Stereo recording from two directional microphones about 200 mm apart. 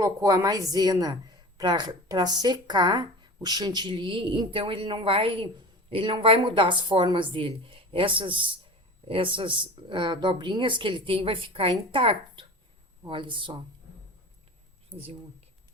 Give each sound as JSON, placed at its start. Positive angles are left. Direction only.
{"t": 0.0, "sound": "a woman's voice", "side_deg": -15}